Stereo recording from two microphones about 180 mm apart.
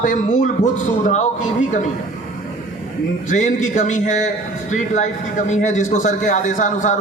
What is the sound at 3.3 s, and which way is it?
A man's voice, 45° left (ahead or behind).